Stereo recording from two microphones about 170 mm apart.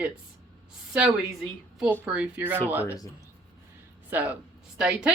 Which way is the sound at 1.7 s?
5° right (ahead or behind).